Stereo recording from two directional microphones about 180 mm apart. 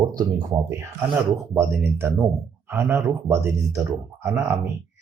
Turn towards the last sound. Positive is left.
turn(degrees=-15)  # may be behind; listen again after turning